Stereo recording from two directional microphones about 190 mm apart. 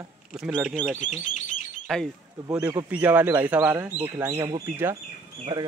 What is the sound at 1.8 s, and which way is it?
Speech, centre (ahead or behind).